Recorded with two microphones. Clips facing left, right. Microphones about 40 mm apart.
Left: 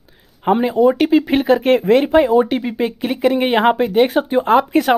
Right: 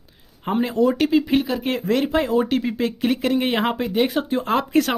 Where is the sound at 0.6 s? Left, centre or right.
Centre.